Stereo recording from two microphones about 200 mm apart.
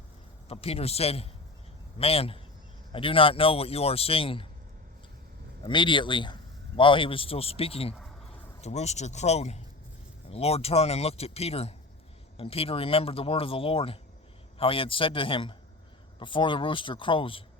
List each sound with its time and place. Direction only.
0.4 s speech: 30° left (ahead or behind)
5.6 s speech: 25° left (ahead or behind)